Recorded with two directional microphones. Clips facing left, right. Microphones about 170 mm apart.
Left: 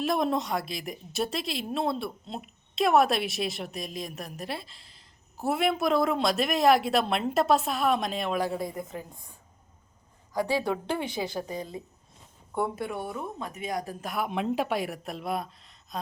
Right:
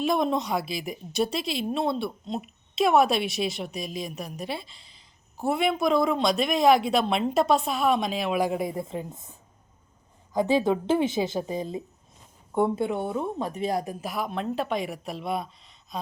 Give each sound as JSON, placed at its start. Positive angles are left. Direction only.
{"t": 0.0, "sound": "a woman's voice", "side_deg": 0}
{"t": 8.4, "sound": "speech", "side_deg": -15}
{"t": 8.7, "sound": "a woman's voice", "side_deg": -30}
{"t": 10.3, "sound": "a woman's voice", "side_deg": -20}
{"t": 13.8, "sound": "a woman's voice", "side_deg": -5}
{"t": 14.3, "sound": "a woman's voice", "side_deg": 15}